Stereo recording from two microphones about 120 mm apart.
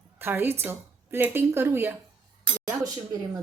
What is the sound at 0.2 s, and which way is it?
A woman's voice, 20° right (ahead or behind).